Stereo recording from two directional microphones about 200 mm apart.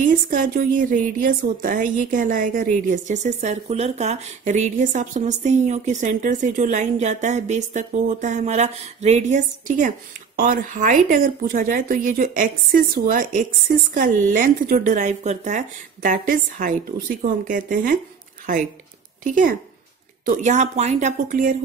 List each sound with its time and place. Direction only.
0.0 s a woman's voice: 40° right (ahead or behind)
19.2 s a woman's voice: 40° right (ahead or behind)